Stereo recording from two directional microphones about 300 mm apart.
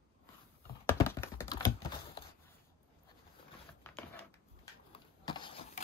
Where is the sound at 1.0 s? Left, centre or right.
Centre.